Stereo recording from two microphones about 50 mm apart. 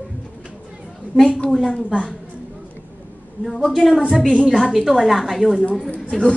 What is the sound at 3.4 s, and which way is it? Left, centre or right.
A woman's voice, centre.